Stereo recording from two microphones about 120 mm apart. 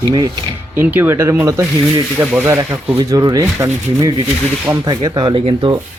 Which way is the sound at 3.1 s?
30° right (ahead or behind).